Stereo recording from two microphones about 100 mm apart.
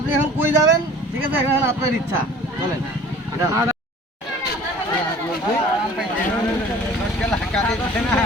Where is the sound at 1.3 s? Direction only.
25° right (ahead or behind).